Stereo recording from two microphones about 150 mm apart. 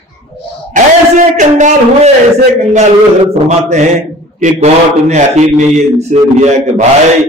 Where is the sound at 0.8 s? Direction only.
55° right (ahead or behind).